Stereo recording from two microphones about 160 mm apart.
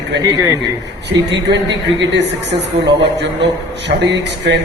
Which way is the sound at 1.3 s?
90° right.